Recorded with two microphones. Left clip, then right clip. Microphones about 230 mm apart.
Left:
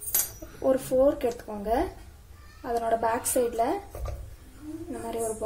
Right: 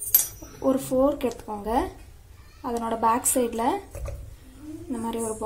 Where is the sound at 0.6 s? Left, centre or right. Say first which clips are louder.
Even; right.